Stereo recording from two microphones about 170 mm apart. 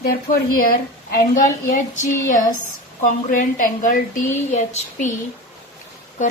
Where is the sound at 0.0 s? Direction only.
60° left (ahead or behind).